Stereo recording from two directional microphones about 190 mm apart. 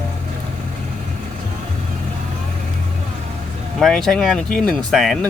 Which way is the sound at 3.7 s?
Centre (ahead or behind).